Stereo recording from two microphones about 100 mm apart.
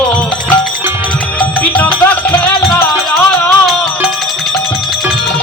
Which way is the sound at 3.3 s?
5° left (ahead or behind).